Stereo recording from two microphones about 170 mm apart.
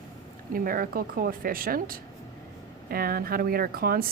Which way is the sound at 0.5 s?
55° right (ahead or behind).